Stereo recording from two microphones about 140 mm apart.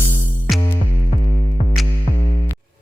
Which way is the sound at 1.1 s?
60° left (ahead or behind).